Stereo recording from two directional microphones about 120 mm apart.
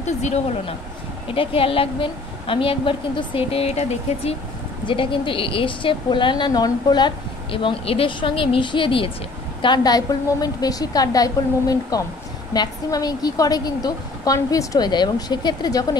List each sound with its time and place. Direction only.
1.3 s a woman's voice: 50° left (ahead or behind)
4.8 s a woman's voice: 45° left (ahead or behind)